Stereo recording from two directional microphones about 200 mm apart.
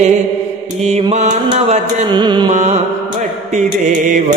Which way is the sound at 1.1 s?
35° right (ahead or behind).